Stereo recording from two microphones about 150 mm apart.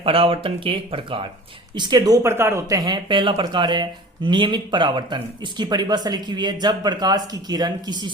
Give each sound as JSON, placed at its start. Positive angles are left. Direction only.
{"t": 0.0, "sound": "speech", "side_deg": -35}